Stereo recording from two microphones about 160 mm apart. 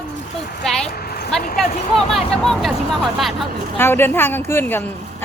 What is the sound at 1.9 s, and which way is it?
Speech, 40° left (ahead or behind).